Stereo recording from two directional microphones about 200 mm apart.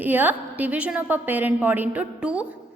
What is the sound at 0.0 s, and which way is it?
A woman's voice, 10° right (ahead or behind).